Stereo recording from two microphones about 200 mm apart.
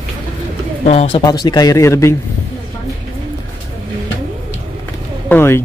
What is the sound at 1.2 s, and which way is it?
Speech, 20° left (ahead or behind).